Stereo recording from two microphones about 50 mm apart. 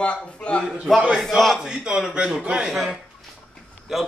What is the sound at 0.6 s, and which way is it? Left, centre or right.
Speech, centre.